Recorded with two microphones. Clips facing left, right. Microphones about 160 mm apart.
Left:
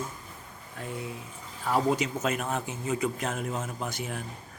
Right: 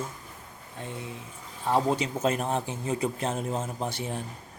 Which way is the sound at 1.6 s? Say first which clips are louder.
Right 1 dB; 25° right (ahead or behind).